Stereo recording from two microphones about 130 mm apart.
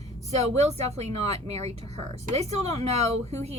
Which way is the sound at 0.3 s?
55° right (ahead or behind).